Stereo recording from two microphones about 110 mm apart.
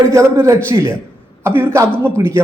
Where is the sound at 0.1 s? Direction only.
25° right (ahead or behind).